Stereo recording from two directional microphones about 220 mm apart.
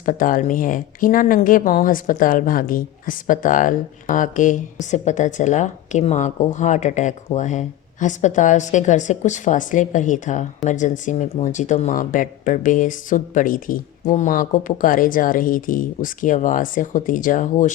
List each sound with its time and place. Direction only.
0.0 s speech: 40° left (ahead or behind)